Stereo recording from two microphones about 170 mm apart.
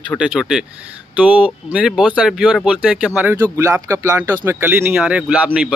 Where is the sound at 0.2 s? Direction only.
5° right (ahead or behind).